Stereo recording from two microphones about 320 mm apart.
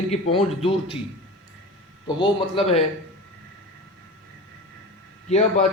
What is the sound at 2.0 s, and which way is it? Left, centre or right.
Speech, centre.